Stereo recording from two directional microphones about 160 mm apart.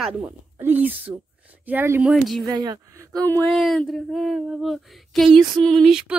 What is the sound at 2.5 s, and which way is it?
Speech, 25° right (ahead or behind).